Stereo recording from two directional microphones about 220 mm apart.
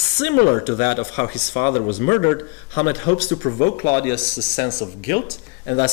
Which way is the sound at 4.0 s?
10° left (ahead or behind).